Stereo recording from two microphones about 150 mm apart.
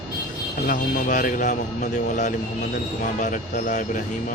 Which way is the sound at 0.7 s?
65° left (ahead or behind).